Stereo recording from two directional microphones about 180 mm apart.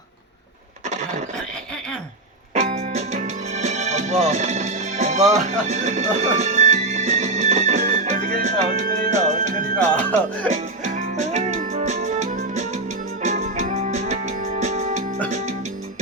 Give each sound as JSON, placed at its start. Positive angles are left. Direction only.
{"t": 2.6, "sound": "music", "side_deg": -45}
{"t": 10.0, "sound": "speech", "side_deg": 10}
{"t": 10.5, "sound": "music", "side_deg": -45}